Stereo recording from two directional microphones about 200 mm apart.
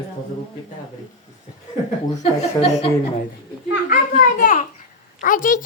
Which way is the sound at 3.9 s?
40° left (ahead or behind).